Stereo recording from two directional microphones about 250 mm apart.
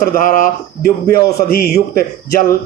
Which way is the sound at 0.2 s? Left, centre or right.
Left.